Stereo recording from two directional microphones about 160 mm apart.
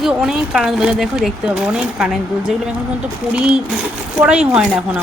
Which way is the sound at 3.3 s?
5° right (ahead or behind).